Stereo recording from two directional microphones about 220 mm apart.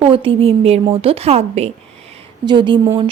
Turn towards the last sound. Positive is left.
turn(degrees=-20)  # may be behind; listen again after turning